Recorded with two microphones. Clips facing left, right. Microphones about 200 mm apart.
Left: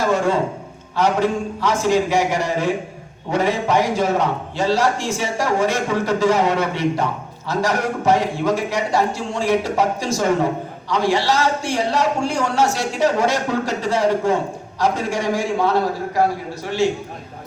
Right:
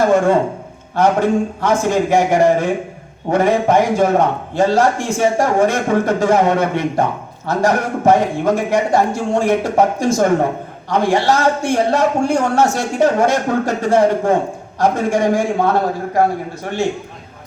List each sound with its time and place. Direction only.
0.0 s a man's voice: 50° right (ahead or behind)